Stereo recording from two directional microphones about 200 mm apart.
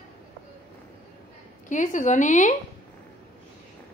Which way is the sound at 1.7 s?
40° left (ahead or behind).